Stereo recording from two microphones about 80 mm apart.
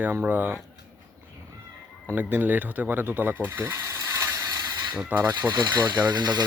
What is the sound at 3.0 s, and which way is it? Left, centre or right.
Mechanisms, right.